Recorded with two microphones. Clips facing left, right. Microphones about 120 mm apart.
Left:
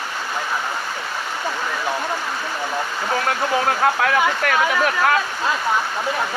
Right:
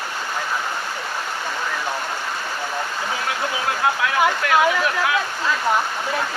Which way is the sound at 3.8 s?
55° left (ahead or behind).